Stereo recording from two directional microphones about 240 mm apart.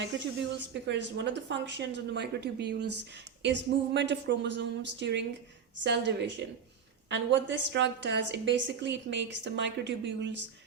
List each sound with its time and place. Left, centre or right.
0.7 s speech: right